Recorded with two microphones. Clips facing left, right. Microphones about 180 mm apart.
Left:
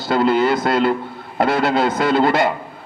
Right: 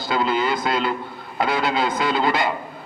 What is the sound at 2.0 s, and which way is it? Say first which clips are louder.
Speech: left 5 dB; 55° left (ahead or behind).